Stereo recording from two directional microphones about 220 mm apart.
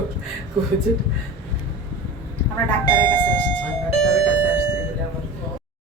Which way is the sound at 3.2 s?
10° left (ahead or behind).